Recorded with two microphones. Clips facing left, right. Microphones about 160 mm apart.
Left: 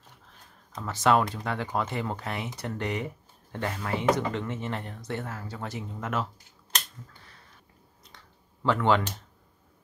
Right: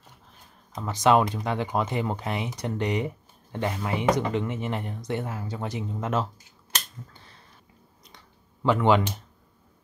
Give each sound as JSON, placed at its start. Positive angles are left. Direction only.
{"t": 0.7, "sound": "speech", "side_deg": -15}
{"t": 8.6, "sound": "speech", "side_deg": -15}